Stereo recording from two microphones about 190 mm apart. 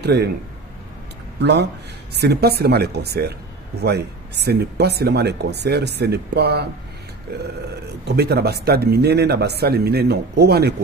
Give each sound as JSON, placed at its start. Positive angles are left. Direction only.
{"t": 0.0, "sound": "a man's voice", "side_deg": -60}
{"t": 1.4, "sound": "speech", "side_deg": -60}